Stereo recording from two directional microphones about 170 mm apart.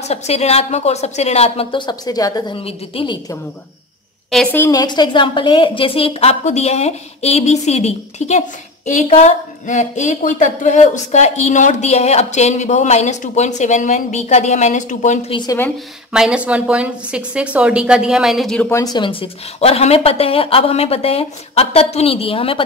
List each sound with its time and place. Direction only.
0.0 s speech: 40° left (ahead or behind)
4.3 s a woman's voice: 5° left (ahead or behind)
4.6 s a woman's voice: 25° left (ahead or behind); by 15.3 s 45° left (ahead or behind)
16.1 s a woman's voice: 5° right (ahead or behind)
18.7 s speech: 20° left (ahead or behind)